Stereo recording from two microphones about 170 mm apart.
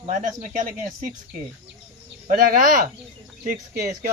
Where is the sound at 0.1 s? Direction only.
50° right (ahead or behind).